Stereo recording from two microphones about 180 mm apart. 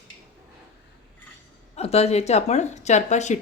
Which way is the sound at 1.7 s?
35° left (ahead or behind).